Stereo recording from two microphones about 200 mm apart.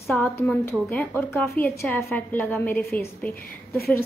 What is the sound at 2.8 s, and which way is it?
Speech, 50° left (ahead or behind).